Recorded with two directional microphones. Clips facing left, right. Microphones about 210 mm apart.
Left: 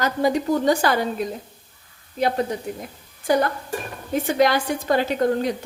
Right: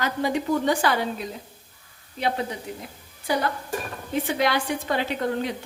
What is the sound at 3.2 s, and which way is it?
A woman's voice, 45° left (ahead or behind).